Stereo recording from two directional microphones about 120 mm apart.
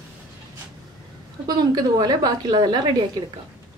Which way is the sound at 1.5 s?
35° right (ahead or behind).